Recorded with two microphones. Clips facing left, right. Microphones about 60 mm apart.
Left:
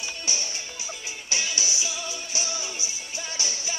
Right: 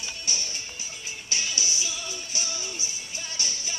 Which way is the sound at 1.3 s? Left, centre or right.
Left.